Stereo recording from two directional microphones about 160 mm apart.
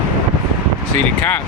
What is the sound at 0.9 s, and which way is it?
Speech, 10° left (ahead or behind).